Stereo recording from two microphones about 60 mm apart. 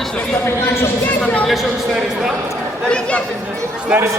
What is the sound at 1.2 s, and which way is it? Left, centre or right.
Speech, centre.